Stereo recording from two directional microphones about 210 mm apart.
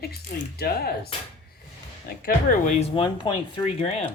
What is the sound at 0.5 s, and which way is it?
Speech, 50° left (ahead or behind).